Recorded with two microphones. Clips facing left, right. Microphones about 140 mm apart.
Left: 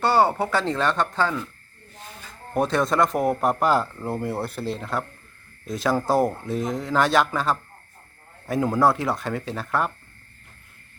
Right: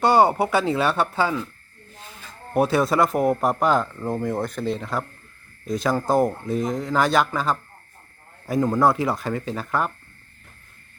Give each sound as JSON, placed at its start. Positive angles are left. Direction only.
{"t": 0.0, "sound": "speech", "side_deg": -15}
{"t": 2.5, "sound": "speech", "side_deg": -5}